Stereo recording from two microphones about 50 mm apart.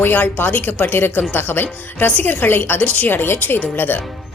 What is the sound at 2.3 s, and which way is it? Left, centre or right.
Speech, left.